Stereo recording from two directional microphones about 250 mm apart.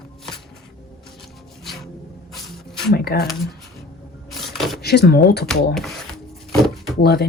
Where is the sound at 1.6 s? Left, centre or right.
Centre.